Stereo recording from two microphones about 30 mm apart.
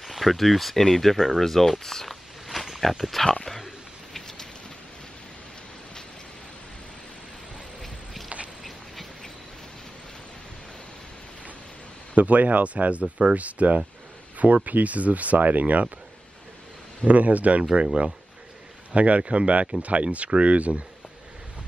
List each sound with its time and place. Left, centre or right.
0.0 s speech: centre
2.0 s a sound: centre
7.8 s a sound: centre
12.2 s speech: right
12.7 s speech: right
17.0 s speech: right
18.9 s speech: right